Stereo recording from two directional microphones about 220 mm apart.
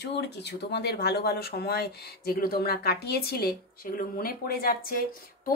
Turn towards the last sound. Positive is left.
turn(degrees=40)  # may be behind; listen again after turning